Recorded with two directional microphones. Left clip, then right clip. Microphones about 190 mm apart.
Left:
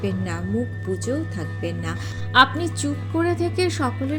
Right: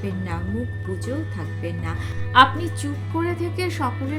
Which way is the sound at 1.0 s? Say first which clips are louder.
Left 2 dB; 15° left (ahead or behind).